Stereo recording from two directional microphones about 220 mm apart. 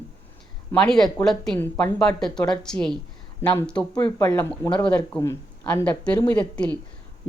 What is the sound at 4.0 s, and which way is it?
Speech, 20° left (ahead or behind).